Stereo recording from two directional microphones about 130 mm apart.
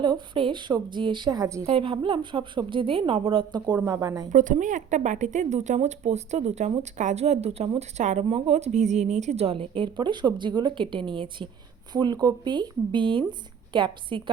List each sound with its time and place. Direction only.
0.0 s a woman's voice: 40° right (ahead or behind)
1.6 s a woman's voice: 45° right (ahead or behind)
3.8 s a woman's voice: 25° right (ahead or behind)
4.3 s speech: 80° right; by 6.8 s 55° right (ahead or behind)
6.9 s speech: 65° right (ahead or behind)
8.3 s a woman's voice: 55° right (ahead or behind); by 14.2 s 40° right (ahead or behind)